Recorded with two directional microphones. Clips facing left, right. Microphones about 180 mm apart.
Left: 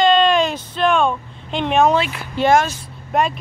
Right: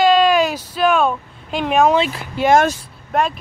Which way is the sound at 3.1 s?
Centre (ahead or behind).